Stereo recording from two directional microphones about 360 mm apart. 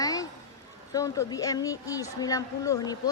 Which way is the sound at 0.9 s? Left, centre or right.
Centre.